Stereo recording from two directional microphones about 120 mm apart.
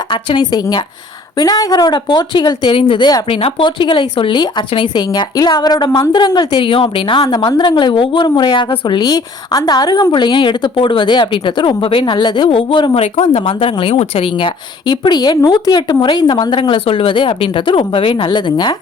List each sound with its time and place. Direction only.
0.1 s a woman's voice: 40° left (ahead or behind)
3.2 s a woman's voice: 50° left (ahead or behind)
12.9 s speech: 60° left (ahead or behind)
13.5 s a woman's voice: 45° left (ahead or behind)